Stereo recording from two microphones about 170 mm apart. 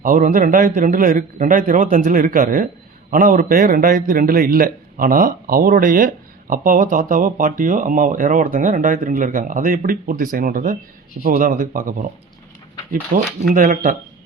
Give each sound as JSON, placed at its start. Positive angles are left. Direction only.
{"t": 0.0, "sound": "a man's voice", "side_deg": -55}
{"t": 13.1, "sound": "speech", "side_deg": -55}